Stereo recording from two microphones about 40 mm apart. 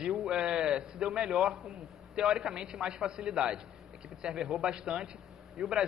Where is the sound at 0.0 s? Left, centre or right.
Centre.